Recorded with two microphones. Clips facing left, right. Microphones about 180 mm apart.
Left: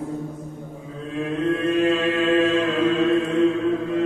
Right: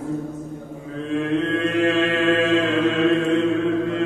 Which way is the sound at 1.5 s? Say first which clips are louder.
Even; 80° right.